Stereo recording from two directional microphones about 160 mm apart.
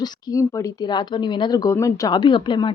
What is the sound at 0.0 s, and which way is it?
Speech, 20° left (ahead or behind).